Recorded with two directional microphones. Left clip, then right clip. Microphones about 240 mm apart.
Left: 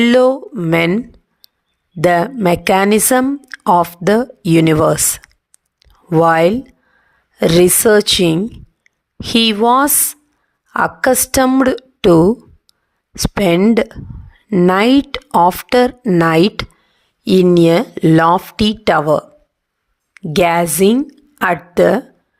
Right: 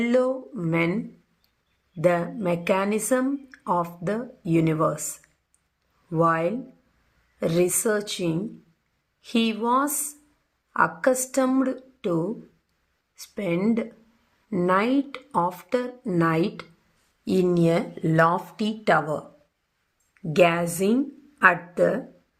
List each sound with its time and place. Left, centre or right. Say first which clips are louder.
0.0 s speech: left 12 dB; left
2.0 s speech: left 10 dB; left